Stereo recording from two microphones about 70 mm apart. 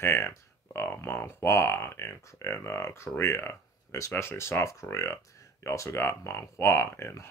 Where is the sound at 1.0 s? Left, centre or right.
Left.